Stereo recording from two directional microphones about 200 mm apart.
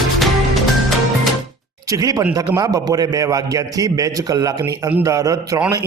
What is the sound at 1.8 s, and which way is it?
A man's voice, 15° right (ahead or behind).